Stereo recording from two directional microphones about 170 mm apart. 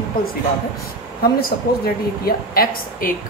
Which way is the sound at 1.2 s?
60° left (ahead or behind).